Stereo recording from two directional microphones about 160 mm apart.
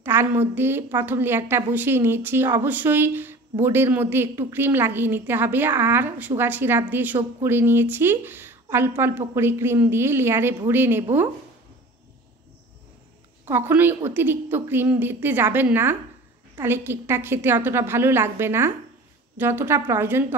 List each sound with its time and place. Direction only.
0.0 s a woman's voice: 15° right (ahead or behind)
13.5 s a woman's voice: 15° right (ahead or behind)